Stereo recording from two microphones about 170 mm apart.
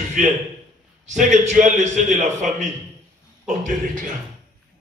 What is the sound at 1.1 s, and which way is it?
A man's voice, 45° right (ahead or behind).